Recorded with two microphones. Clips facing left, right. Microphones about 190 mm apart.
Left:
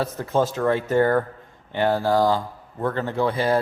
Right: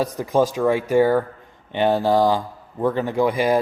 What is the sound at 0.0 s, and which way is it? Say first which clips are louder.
Speech: right 3 dB; 15° right (ahead or behind).